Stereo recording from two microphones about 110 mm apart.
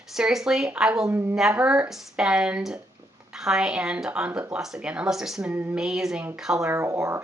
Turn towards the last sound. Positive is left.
turn(degrees=-25)  # may be behind; listen again after turning